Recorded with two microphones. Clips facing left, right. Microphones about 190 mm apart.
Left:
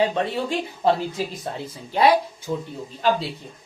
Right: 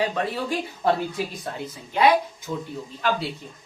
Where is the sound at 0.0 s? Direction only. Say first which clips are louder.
Left 3 dB; 25° left (ahead or behind).